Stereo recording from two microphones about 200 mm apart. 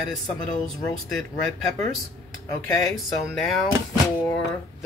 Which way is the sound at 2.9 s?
Centre (ahead or behind).